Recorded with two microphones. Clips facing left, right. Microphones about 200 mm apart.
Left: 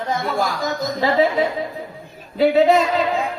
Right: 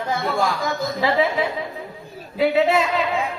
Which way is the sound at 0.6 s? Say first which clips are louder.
Left 1 dB; 45° left (ahead or behind).